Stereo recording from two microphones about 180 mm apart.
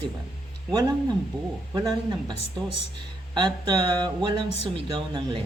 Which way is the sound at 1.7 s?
20° right (ahead or behind).